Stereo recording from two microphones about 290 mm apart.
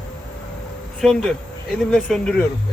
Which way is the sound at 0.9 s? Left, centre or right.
Centre.